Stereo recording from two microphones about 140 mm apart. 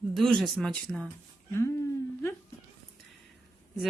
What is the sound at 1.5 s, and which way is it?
Speech, 20° left (ahead or behind).